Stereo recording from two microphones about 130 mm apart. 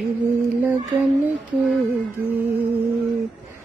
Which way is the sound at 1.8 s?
15° right (ahead or behind).